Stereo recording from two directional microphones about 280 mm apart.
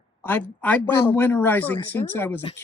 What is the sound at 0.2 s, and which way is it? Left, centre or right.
Speech, centre.